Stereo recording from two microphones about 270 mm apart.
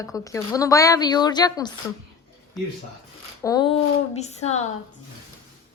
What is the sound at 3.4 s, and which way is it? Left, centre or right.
A woman's voice, centre.